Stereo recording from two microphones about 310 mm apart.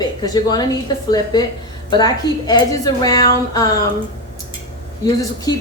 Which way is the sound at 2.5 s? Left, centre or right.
Centre.